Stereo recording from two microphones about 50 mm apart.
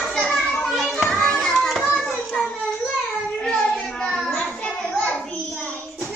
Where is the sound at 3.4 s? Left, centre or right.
Centre.